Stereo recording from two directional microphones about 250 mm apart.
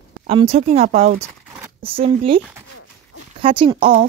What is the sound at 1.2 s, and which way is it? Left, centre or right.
Zipper, centre.